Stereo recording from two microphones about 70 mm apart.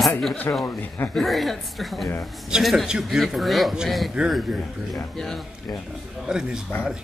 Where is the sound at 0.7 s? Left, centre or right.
Left.